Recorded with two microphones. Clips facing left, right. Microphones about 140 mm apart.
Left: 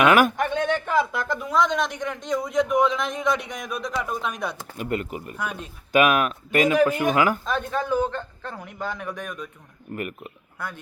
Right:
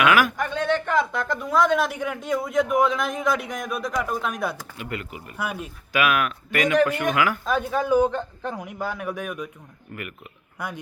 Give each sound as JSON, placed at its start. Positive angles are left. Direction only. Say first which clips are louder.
{"t": 0.1, "sound": "speech", "louder": "left 2 dB", "side_deg": 25}
{"t": 4.8, "sound": "speech", "louder": "left 10 dB", "side_deg": 40}
{"t": 5.4, "sound": "a man's voice", "louder": "right 3 dB", "side_deg": -10}
{"t": 6.1, "sound": "speech", "louder": "left 3 dB", "side_deg": 30}
{"t": 7.4, "sound": "a man's voice", "louder": "right 3 dB", "side_deg": -5}
{"t": 9.9, "sound": "speech", "louder": "left 5 dB", "side_deg": 35}
{"t": 10.6, "sound": "a man's voice", "louder": "right 2 dB", "side_deg": -15}